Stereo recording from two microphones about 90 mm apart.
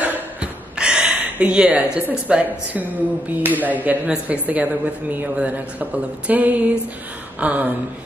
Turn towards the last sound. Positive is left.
turn(degrees=-15)  # may be behind; listen again after turning